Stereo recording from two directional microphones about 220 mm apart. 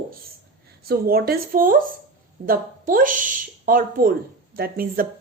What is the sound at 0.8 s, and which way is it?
Speech, 45° right (ahead or behind).